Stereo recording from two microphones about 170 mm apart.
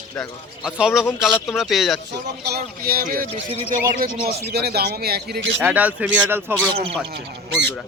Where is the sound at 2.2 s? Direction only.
75° right (ahead or behind); by 3.3 s 55° right (ahead or behind).